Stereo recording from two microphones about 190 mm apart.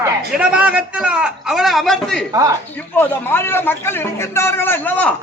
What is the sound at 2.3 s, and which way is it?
Speech, 20° right (ahead or behind).